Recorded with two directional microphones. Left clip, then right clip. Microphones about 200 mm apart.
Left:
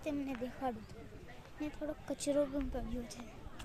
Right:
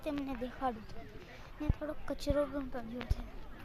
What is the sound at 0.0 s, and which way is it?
Speech, 5° left (ahead or behind).